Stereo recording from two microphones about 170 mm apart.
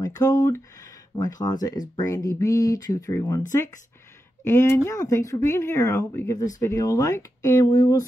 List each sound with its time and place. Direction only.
0.0 s speech: 20° left (ahead or behind)
4.5 s speech: 15° left (ahead or behind)